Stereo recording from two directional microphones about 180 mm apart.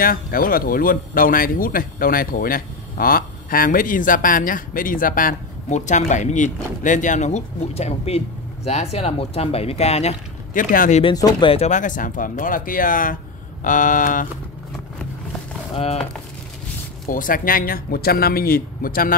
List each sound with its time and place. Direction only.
0.0 s speech: 55° left (ahead or behind)
11.0 s speech: 25° left (ahead or behind); by 14.2 s 45° left (ahead or behind)
15.7 s speech: 35° left (ahead or behind)
17.1 s speech: 50° left (ahead or behind)